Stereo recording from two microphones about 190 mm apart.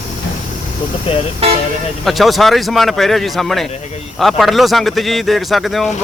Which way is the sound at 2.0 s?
Centre (ahead or behind).